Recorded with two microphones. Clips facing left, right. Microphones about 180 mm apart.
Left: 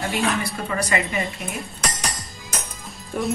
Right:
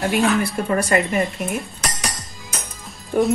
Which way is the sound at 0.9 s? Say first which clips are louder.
Right 5 dB; centre (ahead or behind).